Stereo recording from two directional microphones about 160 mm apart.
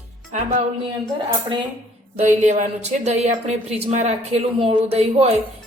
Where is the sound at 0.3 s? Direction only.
45° right (ahead or behind).